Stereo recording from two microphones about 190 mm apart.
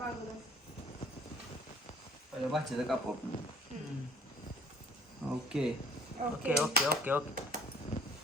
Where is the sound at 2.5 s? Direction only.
Centre (ahead or behind).